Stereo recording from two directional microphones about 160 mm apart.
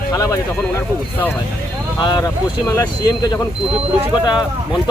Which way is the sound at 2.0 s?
25° left (ahead or behind).